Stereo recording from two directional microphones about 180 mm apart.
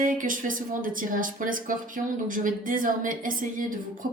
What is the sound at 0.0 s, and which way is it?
A woman's voice, 50° right (ahead or behind).